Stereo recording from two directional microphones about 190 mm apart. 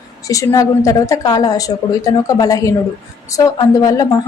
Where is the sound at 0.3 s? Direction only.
15° left (ahead or behind).